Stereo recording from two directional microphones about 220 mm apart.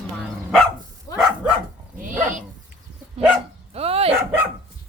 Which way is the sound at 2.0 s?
35° right (ahead or behind).